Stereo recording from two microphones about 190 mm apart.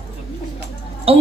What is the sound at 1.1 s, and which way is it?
Music, 30° right (ahead or behind).